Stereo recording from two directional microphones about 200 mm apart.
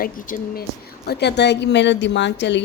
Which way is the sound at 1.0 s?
55° left (ahead or behind).